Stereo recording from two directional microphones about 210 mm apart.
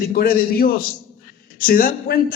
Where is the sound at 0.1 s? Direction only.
45° left (ahead or behind).